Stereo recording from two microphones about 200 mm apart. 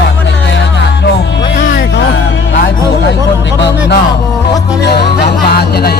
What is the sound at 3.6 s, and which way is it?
Music, 60° left (ahead or behind).